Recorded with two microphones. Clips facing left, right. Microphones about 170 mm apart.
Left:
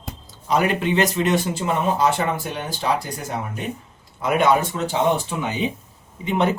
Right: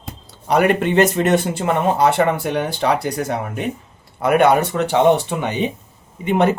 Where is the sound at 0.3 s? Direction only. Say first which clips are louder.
Right 5 dB; 65° right (ahead or behind).